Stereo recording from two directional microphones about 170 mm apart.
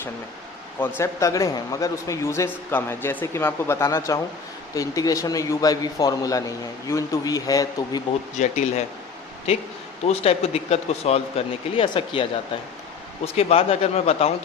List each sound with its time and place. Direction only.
0.8 s a man's voice: 15° left (ahead or behind)
8.4 s speech: 40° left (ahead or behind)
10.1 s speech: 40° left (ahead or behind)
13.2 s speech: 35° left (ahead or behind)